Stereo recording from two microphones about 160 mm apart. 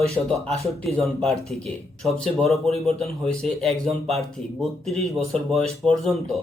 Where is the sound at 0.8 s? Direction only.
5° left (ahead or behind).